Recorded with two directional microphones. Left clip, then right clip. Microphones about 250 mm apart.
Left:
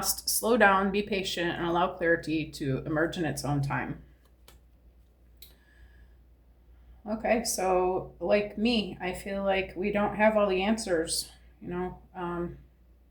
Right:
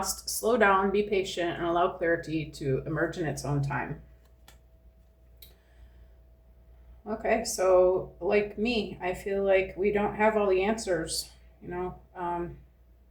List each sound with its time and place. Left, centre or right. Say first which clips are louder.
0.0 s speech: even; left
7.0 s speech: even; left
11.7 s a sound: even; left